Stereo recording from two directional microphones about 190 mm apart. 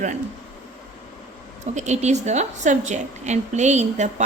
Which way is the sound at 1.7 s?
35° right (ahead or behind).